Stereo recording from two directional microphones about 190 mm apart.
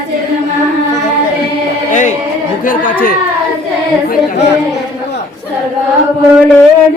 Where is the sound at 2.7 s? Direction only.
50° left (ahead or behind).